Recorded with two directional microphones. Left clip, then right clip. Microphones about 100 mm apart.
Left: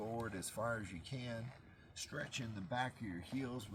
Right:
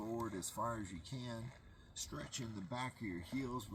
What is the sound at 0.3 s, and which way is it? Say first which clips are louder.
Speech: even; 30° left (ahead or behind).